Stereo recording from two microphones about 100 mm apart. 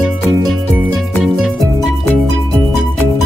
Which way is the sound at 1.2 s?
5° right (ahead or behind).